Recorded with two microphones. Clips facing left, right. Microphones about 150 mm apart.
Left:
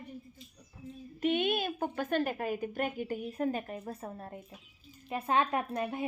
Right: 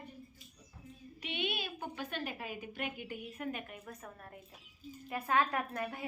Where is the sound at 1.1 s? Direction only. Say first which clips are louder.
Left 10 dB; 45° left (ahead or behind); by 6.0 s 25° left (ahead or behind).